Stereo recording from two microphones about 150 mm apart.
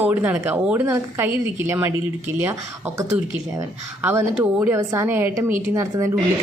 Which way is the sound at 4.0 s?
10° right (ahead or behind).